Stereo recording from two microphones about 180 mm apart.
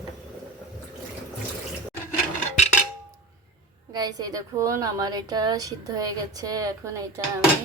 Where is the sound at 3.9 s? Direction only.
20° right (ahead or behind).